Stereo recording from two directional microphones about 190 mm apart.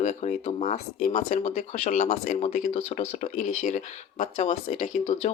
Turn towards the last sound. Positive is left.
turn(degrees=35)  # may be behind; listen again after turning